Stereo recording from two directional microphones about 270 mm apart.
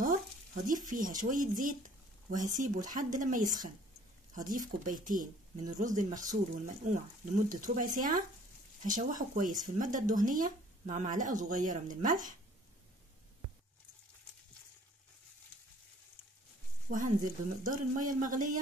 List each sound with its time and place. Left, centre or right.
0.8 s speech: right
16.9 s speech: right